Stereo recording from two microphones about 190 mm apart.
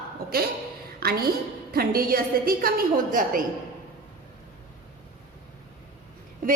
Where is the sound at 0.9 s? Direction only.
55° right (ahead or behind).